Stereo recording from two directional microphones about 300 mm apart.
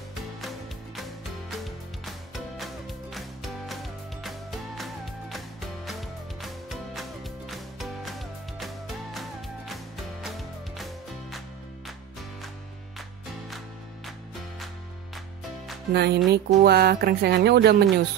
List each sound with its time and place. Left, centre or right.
0.4 s music: centre
2.5 s music: centre
15.9 s speech: right